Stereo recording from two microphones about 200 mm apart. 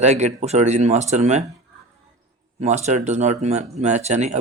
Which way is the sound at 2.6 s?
35° right (ahead or behind).